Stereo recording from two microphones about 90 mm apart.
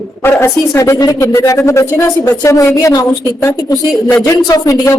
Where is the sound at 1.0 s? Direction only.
45° left (ahead or behind).